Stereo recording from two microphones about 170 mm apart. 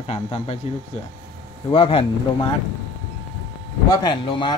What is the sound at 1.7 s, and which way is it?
Speech, 35° left (ahead or behind).